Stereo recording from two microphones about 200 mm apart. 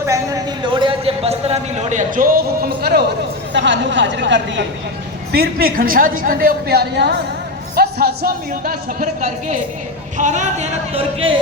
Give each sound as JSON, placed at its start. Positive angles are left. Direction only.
{"t": 0.0, "sound": "a man's voice", "side_deg": -15}
{"t": 3.5, "sound": "speech", "side_deg": -65}
{"t": 5.3, "sound": "a woman's voice", "side_deg": -50}